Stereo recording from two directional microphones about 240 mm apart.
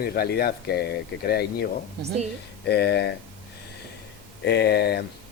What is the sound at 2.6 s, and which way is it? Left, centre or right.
Speech, left.